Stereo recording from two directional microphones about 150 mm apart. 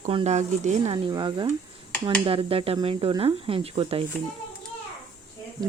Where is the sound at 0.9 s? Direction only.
30° right (ahead or behind).